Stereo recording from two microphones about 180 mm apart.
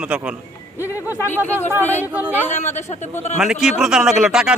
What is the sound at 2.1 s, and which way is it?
Speech, 10° right (ahead or behind).